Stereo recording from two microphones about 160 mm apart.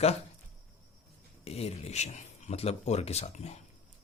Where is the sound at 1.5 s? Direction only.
40° left (ahead or behind).